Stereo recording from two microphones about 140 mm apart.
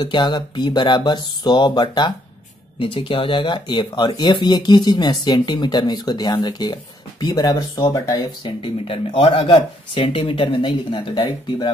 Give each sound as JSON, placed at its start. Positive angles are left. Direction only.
{"t": 0.0, "sound": "speech", "side_deg": 35}